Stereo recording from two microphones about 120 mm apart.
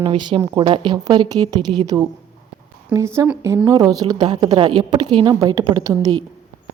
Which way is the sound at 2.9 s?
25° right (ahead or behind).